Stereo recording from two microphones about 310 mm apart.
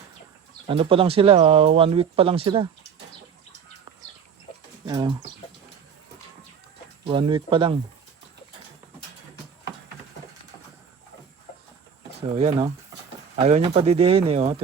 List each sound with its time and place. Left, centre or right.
0.7 s speech: centre
4.9 s speech: centre
7.0 s speech: centre
12.3 s speech: right